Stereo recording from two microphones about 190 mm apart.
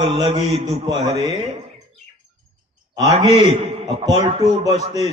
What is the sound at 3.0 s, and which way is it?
A man's voice, 30° right (ahead or behind).